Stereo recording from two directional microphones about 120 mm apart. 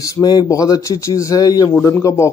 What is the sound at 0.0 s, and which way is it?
Speech, 30° left (ahead or behind).